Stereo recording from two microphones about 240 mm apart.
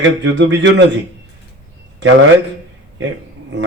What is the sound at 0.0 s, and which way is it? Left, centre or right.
Speech, right.